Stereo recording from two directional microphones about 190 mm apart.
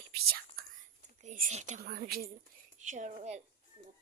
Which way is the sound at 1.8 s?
55° right (ahead or behind).